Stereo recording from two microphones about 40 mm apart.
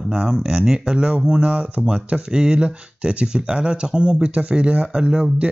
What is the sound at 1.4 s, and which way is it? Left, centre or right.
Speech, right.